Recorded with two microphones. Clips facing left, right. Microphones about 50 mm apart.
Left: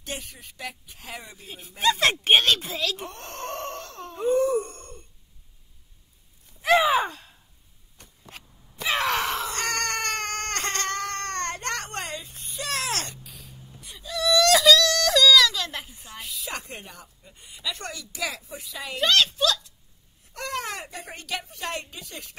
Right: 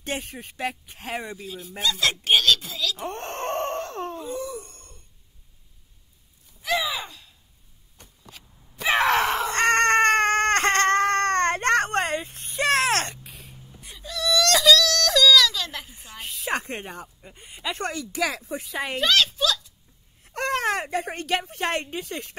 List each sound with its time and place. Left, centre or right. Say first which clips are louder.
0.0 s speech: right 5 dB; right
1.8 s speech: left 3 dB; left
3.0 s wail: right 5 dB; right
4.2 s wail: left 10 dB; left
6.6 s a sound: left 7 dB; left
8.8 s screaming: right 4 dB; right
14.0 s wail: left 2 dB; centre
16.2 s speech: right 7 dB; right
18.9 s a woman's voice: even; centre
20.2 s speech: right 7 dB; right